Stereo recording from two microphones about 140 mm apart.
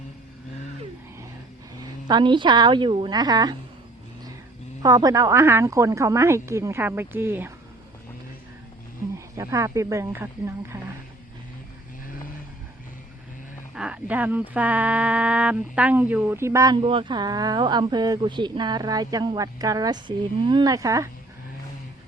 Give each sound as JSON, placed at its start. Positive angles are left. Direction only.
{"t": 1.8, "sound": "speech", "side_deg": -30}
{"t": 4.8, "sound": "speech", "side_deg": -25}
{"t": 9.1, "sound": "speech", "side_deg": -20}
{"t": 13.7, "sound": "speech", "side_deg": -10}
{"t": 16.7, "sound": "speech", "side_deg": -40}